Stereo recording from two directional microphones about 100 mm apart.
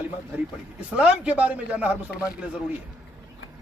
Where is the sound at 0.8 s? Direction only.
10° right (ahead or behind).